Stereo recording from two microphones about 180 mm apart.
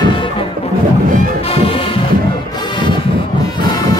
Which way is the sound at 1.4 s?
30° left (ahead or behind).